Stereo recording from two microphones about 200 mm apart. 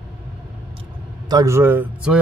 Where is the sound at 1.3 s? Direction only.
15° right (ahead or behind).